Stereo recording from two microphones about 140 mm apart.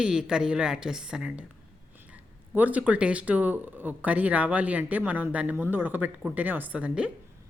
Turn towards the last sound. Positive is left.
turn(degrees=-5)  # may be behind; listen again after turning